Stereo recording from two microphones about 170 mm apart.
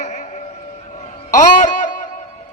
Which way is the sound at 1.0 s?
45° left (ahead or behind).